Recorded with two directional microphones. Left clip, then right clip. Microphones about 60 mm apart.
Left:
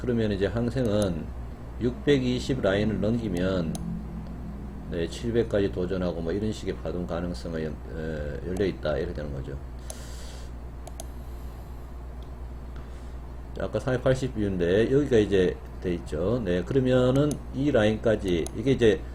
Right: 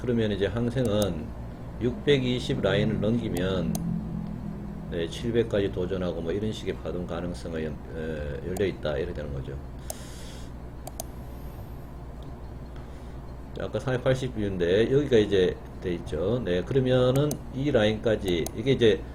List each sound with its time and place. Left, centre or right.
0.0 s speech: centre
1.8 s speech: centre
4.9 s speech: centre
13.6 s speech: centre